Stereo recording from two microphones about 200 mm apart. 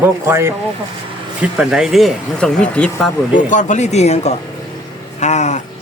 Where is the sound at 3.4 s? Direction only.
40° left (ahead or behind).